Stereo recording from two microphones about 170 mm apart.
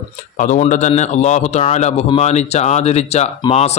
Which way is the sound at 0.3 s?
45° left (ahead or behind).